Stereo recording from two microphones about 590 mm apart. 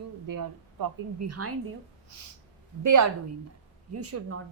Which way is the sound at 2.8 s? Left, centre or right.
Right.